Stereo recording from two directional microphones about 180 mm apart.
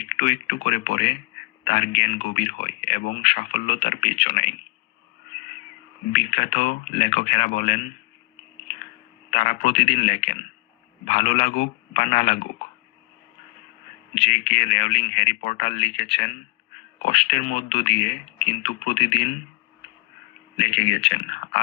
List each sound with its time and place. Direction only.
0.0 s speech: 40° left (ahead or behind)
6.1 s speech: 40° left (ahead or behind)
9.3 s speech: 40° left (ahead or behind)
14.2 s speech: 40° left (ahead or behind)
20.6 s speech: 40° left (ahead or behind)